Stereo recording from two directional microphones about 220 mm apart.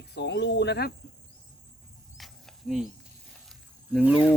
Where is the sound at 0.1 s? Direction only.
50° left (ahead or behind).